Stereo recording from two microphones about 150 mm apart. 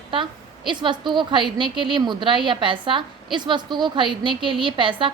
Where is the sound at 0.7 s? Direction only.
30° right (ahead or behind).